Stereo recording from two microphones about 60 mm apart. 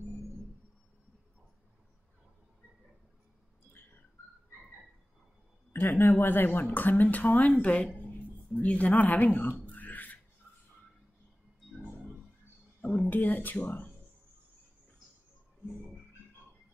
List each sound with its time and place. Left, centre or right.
5.9 s speech: left
8.0 s a sound: left
8.6 s a woman's voice: left
9.7 s beatboxing: left
12.8 s speech: left